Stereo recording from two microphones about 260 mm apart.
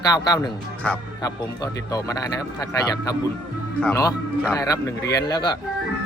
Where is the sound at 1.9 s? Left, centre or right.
Centre.